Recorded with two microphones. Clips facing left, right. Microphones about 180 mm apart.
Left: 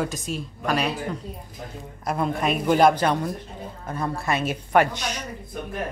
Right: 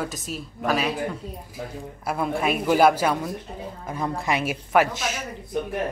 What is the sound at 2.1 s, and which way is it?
A woman's voice, 5° right (ahead or behind).